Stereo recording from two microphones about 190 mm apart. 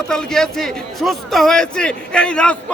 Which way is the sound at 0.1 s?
5° left (ahead or behind).